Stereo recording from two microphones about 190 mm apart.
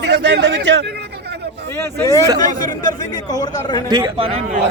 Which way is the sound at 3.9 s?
25° right (ahead or behind).